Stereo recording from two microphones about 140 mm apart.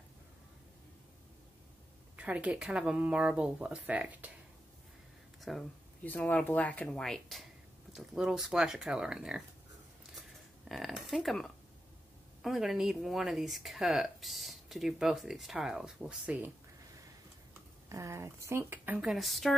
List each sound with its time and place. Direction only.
2.1 s speech: 10° right (ahead or behind)
5.4 s speech: centre (ahead or behind)
6.0 s speech: 10° left (ahead or behind); by 9.4 s 5° right (ahead or behind)
10.7 s speech: centre (ahead or behind)
17.8 s a woman's voice: 20° right (ahead or behind)
19.1 s speech: centre (ahead or behind)